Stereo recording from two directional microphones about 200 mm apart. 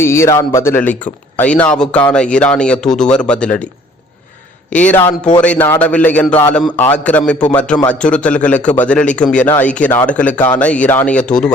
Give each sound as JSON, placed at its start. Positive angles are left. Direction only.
{"t": 0.0, "sound": "a man's voice", "side_deg": 15}
{"t": 4.7, "sound": "a man's voice", "side_deg": 5}